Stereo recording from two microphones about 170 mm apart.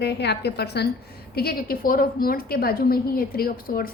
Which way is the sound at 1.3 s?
65° left (ahead or behind).